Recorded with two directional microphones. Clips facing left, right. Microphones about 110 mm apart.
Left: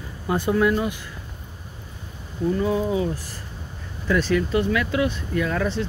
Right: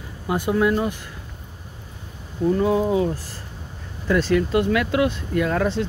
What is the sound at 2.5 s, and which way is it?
Speech, 55° right (ahead or behind).